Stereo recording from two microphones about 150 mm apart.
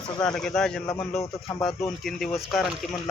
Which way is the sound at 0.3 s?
5° left (ahead or behind).